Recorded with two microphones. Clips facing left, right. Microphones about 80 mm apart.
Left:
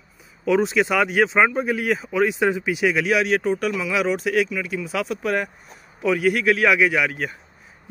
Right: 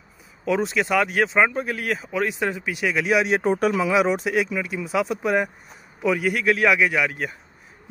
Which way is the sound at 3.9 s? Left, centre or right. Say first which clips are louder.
Even; centre.